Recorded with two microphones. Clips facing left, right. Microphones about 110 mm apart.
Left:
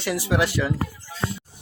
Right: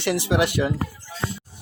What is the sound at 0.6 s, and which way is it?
Speech, 35° right (ahead or behind).